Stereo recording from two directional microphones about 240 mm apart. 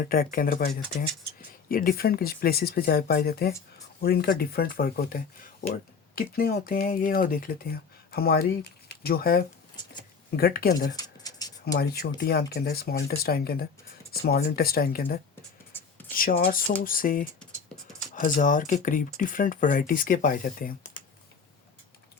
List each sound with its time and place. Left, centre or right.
0.0 s speech: left
1.7 s speech: left
10.9 s a sound: centre
11.8 s speech: left